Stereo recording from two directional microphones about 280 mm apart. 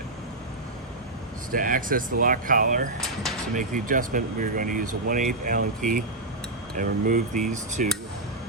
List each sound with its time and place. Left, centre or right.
1.5 s speech: right